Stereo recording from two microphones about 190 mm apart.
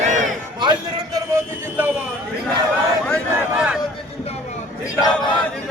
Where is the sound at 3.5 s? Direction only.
5° right (ahead or behind).